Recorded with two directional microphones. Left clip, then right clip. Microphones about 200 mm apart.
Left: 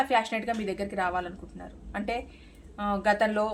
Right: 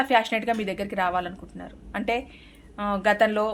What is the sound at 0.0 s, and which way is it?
Speech, 35° right (ahead or behind).